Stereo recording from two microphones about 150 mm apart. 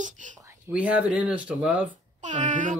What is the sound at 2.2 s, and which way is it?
Speech, 55° right (ahead or behind).